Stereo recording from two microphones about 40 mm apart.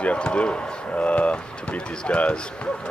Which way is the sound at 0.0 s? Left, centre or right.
Left.